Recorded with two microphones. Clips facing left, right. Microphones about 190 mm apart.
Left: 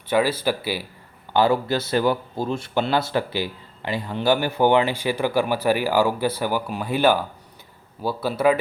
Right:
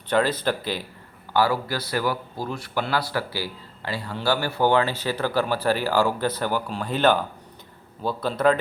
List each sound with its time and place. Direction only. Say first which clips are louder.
0.1 s speech: left 1 dB; 10° left (ahead or behind)
1.3 s speech: left 3 dB; 25° left (ahead or behind)